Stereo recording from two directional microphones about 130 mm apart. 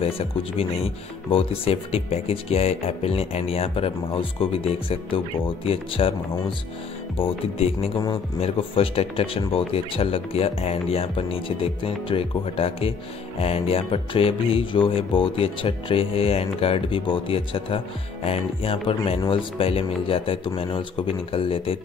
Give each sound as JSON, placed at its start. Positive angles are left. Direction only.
{"t": 0.0, "sound": "speech", "side_deg": 50}
{"t": 7.2, "sound": "speech", "side_deg": 50}